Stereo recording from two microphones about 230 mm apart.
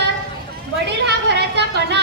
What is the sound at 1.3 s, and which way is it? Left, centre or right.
Speech, right.